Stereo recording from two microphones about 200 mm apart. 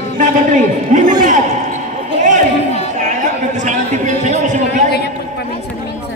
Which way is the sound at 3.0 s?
40° right (ahead or behind).